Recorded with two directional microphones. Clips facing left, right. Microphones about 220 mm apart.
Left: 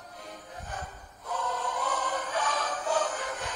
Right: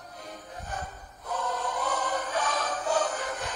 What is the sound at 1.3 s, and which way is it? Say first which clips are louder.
Music: right 1 dB; 40° right (ahead or behind).